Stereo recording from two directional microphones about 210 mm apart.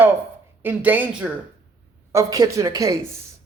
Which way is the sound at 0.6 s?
10° right (ahead or behind).